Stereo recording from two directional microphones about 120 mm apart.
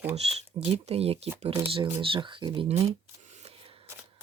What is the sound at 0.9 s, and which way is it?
Speech, 55° right (ahead or behind).